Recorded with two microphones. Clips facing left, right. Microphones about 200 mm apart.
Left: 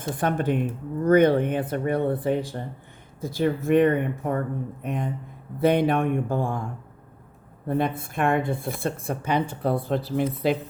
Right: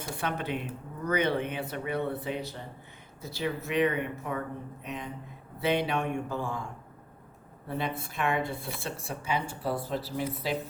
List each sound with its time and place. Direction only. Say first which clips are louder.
0.0 s speech: left 8 dB; 50° left (ahead or behind)
7.7 s speech: left 8 dB; 50° left (ahead or behind)